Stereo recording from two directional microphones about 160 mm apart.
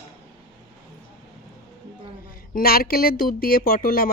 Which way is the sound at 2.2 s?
65° left (ahead or behind).